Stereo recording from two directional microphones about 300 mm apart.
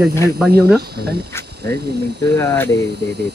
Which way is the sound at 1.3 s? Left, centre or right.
Centre.